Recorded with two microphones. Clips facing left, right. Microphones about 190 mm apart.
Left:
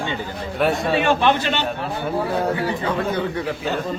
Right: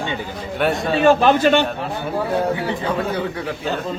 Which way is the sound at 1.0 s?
40° right (ahead or behind).